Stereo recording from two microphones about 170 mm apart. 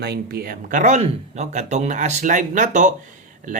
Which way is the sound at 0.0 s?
65° right (ahead or behind).